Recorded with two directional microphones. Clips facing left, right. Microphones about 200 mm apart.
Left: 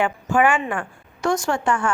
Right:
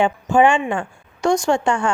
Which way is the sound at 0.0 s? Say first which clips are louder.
Right 4 dB; 25° right (ahead or behind).